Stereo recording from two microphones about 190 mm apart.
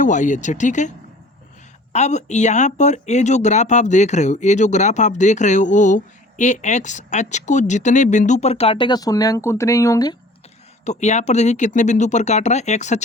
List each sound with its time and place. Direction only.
0.0 s speech: 40° left (ahead or behind); by 10.2 s 20° left (ahead or behind)
10.8 s speech: 35° left (ahead or behind)